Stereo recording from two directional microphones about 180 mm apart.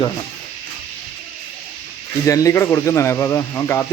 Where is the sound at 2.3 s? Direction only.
20° left (ahead or behind).